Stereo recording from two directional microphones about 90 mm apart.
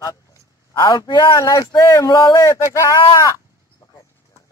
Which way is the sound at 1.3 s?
40° left (ahead or behind).